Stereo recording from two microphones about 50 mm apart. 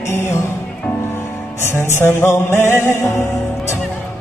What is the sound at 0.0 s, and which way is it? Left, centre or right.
Music, left.